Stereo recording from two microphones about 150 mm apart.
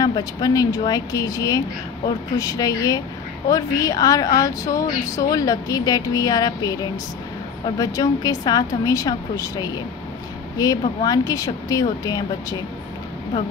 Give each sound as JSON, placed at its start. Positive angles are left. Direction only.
{"t": 0.0, "sound": "a woman's voice", "side_deg": 25}